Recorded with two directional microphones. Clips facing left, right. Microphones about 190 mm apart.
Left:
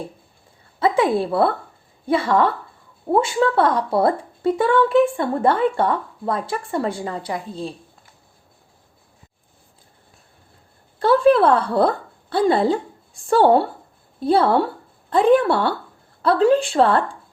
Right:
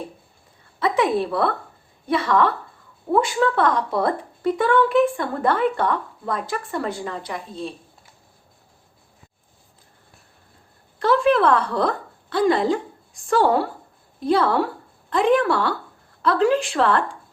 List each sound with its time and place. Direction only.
0.8 s a woman's voice: 30° left (ahead or behind)
11.0 s a woman's voice: 30° left (ahead or behind)